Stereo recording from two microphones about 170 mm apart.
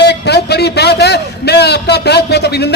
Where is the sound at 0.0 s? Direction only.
75° left (ahead or behind).